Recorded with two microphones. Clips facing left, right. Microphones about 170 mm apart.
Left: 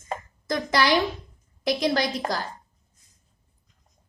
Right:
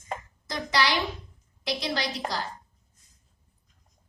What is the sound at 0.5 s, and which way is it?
A woman's voice, 50° left (ahead or behind).